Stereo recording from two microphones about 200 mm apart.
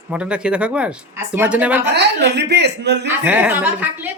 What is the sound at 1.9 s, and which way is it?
Speech, 60° right (ahead or behind).